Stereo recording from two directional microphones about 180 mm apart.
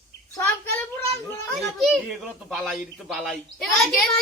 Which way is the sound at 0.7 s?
10° left (ahead or behind).